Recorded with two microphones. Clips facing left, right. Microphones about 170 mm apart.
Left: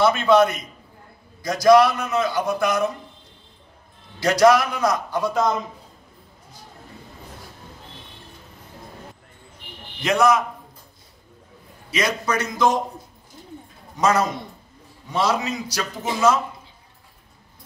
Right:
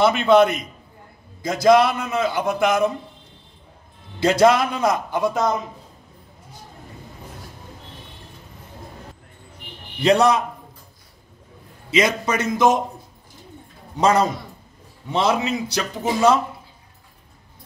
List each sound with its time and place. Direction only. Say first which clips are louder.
0.0 s a man's voice: right 1 dB; 25° right (ahead or behind)
4.2 s a man's voice: even; 25° right (ahead or behind)
10.0 s a man's voice: right 2 dB; 35° right (ahead or behind)
11.9 s a man's voice: right 3 dB; 25° right (ahead or behind)
13.9 s a man's voice: right 2 dB; 30° right (ahead or behind)